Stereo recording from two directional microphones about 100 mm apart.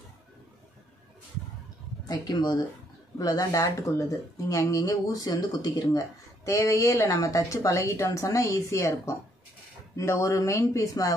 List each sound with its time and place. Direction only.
2.0 s speech: 45° left (ahead or behind)